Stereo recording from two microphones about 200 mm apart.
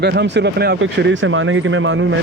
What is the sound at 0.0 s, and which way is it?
Speech, 55° right (ahead or behind).